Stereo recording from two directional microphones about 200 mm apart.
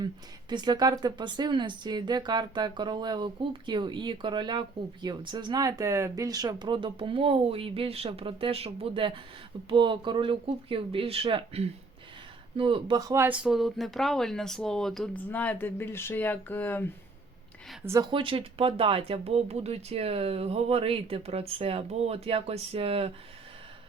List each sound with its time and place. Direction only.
0.5 s speech: 20° right (ahead or behind); by 16.9 s 10° left (ahead or behind)
17.8 s speech: 15° right (ahead or behind)